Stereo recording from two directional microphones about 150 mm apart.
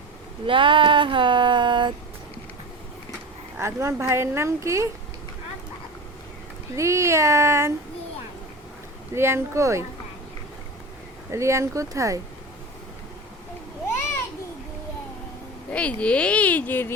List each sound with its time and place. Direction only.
0.4 s a sound: 35° right (ahead or behind)
3.6 s speech: 15° right (ahead or behind)
6.7 s speech: 20° right (ahead or behind)
9.1 s speech: 15° right (ahead or behind)
11.3 s speech: 20° right (ahead or behind)
15.7 s speech: 10° left (ahead or behind)